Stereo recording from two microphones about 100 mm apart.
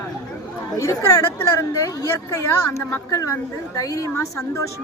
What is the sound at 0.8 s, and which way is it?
A woman's voice, 35° left (ahead or behind).